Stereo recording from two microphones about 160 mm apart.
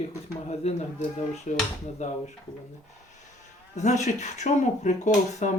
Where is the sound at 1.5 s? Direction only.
50° left (ahead or behind).